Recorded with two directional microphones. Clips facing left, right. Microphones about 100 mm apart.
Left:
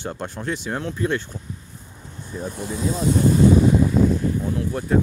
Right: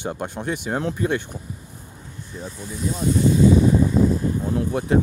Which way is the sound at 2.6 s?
90° left.